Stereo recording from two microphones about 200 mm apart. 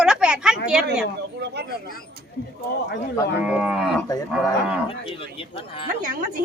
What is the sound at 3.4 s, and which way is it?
A woman's voice, 5° right (ahead or behind).